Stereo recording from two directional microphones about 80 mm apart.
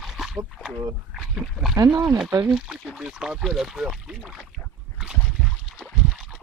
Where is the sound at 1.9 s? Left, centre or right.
Right.